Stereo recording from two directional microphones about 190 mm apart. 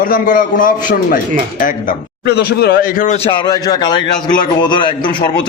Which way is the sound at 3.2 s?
25° left (ahead or behind).